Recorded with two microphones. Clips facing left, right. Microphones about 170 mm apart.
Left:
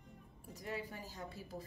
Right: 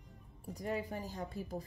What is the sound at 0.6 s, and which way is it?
A woman's voice, 45° right (ahead or behind).